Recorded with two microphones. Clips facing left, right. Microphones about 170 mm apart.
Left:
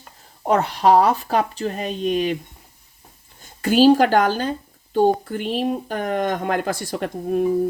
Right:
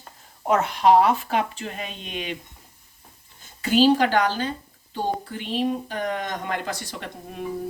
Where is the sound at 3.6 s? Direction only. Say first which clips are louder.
Left 4 dB; 45° left (ahead or behind).